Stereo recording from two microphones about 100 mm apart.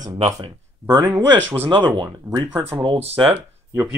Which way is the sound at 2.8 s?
75° right (ahead or behind).